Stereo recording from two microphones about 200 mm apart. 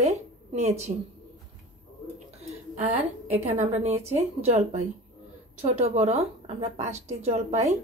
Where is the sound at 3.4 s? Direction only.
35° right (ahead or behind).